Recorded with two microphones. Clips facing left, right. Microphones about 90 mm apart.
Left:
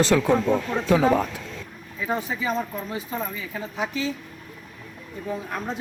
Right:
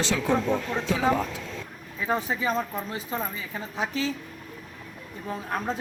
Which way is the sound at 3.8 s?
35° right (ahead or behind).